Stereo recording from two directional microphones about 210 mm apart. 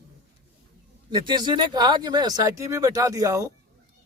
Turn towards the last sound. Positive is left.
turn(degrees=-15)  # may be behind; listen again after turning